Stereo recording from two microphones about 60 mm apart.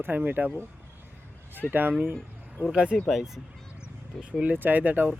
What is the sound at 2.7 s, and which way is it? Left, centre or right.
Speech, centre.